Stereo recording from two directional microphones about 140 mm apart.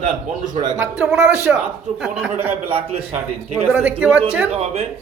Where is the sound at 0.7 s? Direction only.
5° right (ahead or behind).